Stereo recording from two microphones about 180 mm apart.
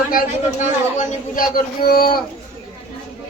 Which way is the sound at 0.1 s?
50° left (ahead or behind).